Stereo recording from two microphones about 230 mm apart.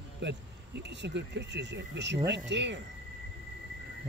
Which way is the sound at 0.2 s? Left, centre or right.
Right.